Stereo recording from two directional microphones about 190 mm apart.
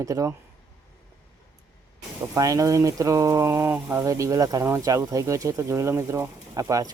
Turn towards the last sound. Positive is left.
turn(degrees=-15)  # may be behind; listen again after turning